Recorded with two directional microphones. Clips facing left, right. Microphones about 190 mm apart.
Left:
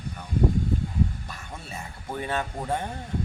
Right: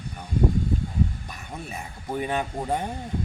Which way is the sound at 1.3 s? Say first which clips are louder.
Right 3 dB; 15° right (ahead or behind).